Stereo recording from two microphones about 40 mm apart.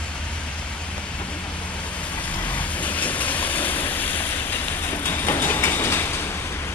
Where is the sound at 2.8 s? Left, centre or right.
Left.